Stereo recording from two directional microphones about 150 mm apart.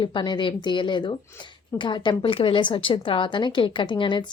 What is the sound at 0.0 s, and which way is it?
Speech, 35° left (ahead or behind).